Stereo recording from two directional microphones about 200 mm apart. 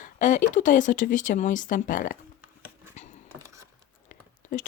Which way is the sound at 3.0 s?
35° left (ahead or behind).